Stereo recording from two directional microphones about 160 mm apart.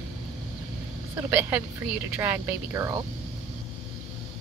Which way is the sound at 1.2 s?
15° right (ahead or behind).